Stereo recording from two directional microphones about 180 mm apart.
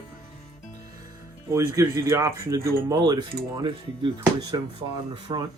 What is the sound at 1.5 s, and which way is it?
Speech, 15° right (ahead or behind).